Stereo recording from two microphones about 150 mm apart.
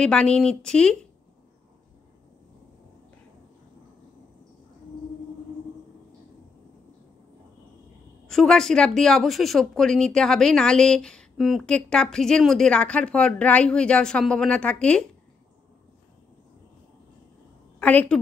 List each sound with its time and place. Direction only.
0.0 s speech: 5° left (ahead or behind)
8.3 s speech: 5° left (ahead or behind)
17.7 s a woman's voice: 10° left (ahead or behind)